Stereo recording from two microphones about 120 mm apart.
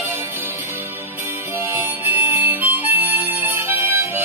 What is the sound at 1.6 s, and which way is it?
Music, 20° right (ahead or behind).